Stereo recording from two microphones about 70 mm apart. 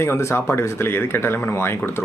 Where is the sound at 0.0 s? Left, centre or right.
Left.